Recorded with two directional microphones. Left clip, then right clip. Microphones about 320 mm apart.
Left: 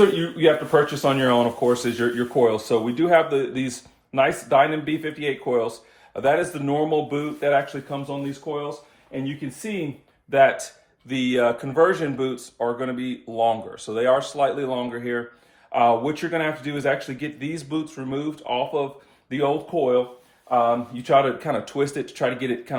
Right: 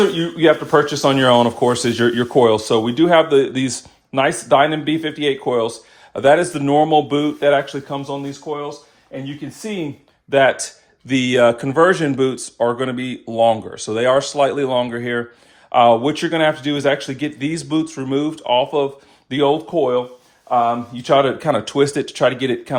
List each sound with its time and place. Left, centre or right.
0.3 s speech: right
10.2 s speech: right